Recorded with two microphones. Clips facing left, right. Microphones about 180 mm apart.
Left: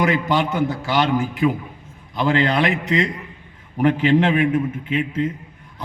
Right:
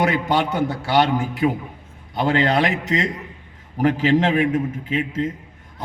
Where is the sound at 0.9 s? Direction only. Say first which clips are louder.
Right 1 dB; 40° right (ahead or behind).